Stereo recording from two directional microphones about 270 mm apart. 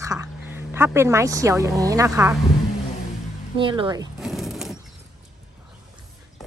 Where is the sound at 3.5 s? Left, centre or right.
Centre.